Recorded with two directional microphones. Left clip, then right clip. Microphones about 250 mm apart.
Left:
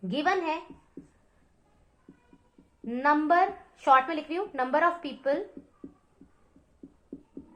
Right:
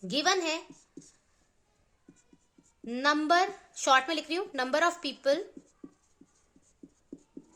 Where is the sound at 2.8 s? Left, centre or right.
Right.